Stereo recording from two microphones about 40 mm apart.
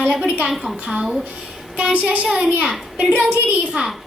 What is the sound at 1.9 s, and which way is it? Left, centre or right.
Speech, right.